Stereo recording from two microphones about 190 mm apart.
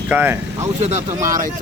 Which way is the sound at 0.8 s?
40° right (ahead or behind).